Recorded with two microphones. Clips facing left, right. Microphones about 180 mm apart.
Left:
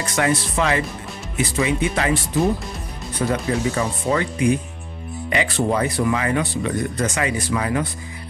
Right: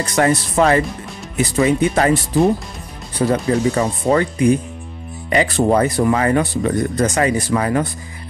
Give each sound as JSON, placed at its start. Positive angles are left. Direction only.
{"t": 0.0, "sound": "speech", "side_deg": -40}